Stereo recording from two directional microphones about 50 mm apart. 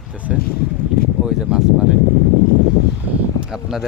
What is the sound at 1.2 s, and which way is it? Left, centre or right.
Speech, centre.